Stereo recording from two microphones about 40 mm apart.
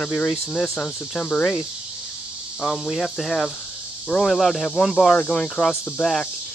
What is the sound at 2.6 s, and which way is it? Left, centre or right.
Speech, centre.